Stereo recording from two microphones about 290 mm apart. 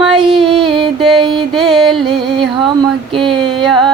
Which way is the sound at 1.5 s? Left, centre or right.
Centre.